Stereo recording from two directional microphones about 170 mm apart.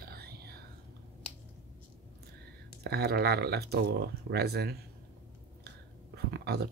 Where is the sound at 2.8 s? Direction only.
70° right (ahead or behind).